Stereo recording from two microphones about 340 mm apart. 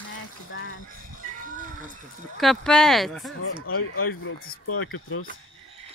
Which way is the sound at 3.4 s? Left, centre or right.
Left.